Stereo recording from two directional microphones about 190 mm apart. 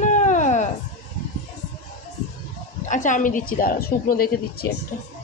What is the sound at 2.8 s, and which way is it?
A woman's voice, 40° left (ahead or behind).